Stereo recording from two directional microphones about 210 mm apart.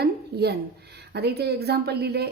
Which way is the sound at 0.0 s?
50° right (ahead or behind).